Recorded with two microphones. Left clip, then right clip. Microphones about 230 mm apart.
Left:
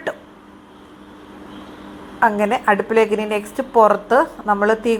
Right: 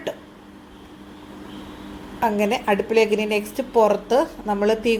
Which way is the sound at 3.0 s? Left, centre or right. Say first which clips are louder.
Left 1 dB; left.